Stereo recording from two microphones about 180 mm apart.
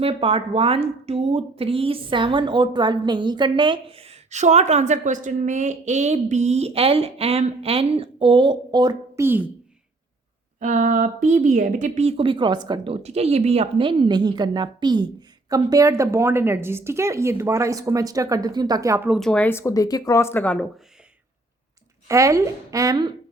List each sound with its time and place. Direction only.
0.0 s speech: 30° right (ahead or behind); by 9.5 s 10° right (ahead or behind)
10.6 s speech: 45° right (ahead or behind); by 19.2 s 10° right (ahead or behind)
19.2 s speech: 5° left (ahead or behind)
22.0 s a woman's voice: 15° right (ahead or behind)